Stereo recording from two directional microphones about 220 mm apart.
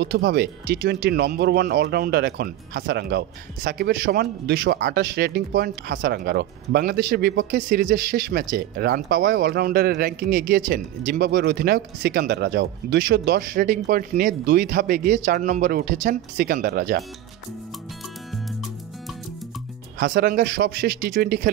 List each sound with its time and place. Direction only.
0.0 s speech: 50° right (ahead or behind)
20.0 s speech: 45° right (ahead or behind)